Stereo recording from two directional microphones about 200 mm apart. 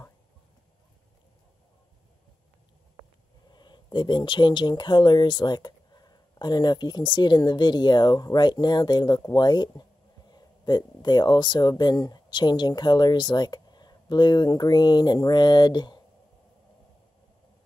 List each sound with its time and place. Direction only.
3.5 s speech: 20° left (ahead or behind)